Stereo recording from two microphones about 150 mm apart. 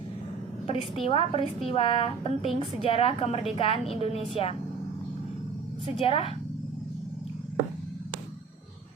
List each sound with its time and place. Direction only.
0.7 s a woman's voice: 40° left (ahead or behind)
6.0 s a woman's voice: 40° left (ahead or behind)